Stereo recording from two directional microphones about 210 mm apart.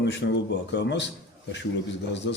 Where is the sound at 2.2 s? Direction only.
60° left (ahead or behind).